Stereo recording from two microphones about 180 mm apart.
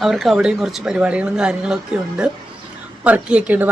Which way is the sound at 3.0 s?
10° right (ahead or behind).